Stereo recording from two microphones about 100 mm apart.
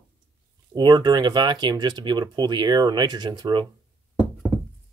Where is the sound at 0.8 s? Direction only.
45° right (ahead or behind).